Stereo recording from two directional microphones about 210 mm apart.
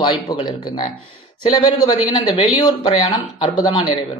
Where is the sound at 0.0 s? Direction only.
20° left (ahead or behind).